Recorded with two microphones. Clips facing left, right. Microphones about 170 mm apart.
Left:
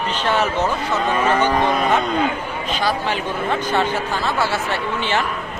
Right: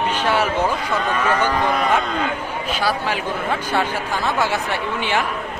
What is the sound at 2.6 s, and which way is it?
Speech, 10° right (ahead or behind).